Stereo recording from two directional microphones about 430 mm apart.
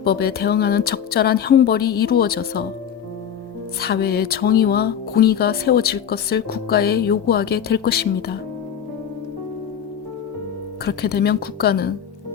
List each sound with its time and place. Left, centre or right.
0.0 s speech: left
3.8 s speech: left
10.8 s speech: left